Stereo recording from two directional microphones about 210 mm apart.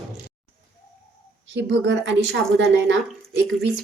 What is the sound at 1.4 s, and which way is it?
Speech, 55° right (ahead or behind).